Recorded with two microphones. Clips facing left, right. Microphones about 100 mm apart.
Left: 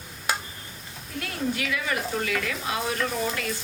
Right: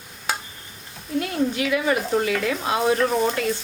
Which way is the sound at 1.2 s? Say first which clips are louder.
Right 5 dB; 25° right (ahead or behind).